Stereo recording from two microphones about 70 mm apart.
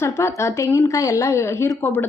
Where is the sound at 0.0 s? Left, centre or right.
Left.